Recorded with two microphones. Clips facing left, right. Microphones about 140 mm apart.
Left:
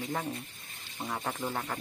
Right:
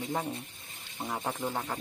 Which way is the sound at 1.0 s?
25° right (ahead or behind).